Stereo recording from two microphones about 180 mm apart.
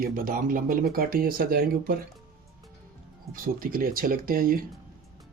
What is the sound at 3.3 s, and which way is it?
Speech, 55° right (ahead or behind).